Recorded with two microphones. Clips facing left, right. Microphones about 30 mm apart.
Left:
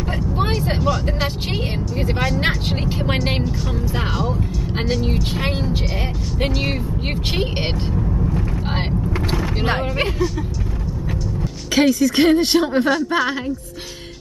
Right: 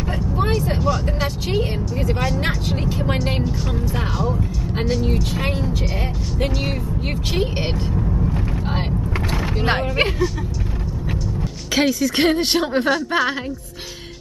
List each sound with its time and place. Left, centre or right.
1.0 s speech: left
2.1 s speech: centre
2.4 s speech: left
5.0 s speech: centre
7.9 s vehicle: centre
9.7 s speech: centre
11.7 s speech: centre